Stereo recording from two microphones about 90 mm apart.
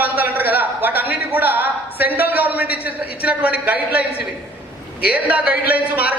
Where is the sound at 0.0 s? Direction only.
20° right (ahead or behind).